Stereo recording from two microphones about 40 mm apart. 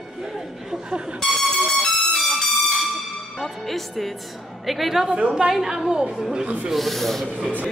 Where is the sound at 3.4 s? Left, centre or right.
Centre.